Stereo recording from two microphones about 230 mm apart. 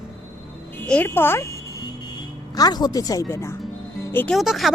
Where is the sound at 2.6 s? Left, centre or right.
Centre.